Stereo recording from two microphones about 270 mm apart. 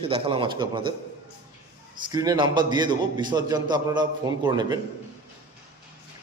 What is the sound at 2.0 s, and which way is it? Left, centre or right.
A man's voice, centre.